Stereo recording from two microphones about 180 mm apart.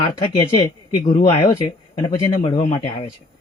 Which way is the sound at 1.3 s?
35° left (ahead or behind).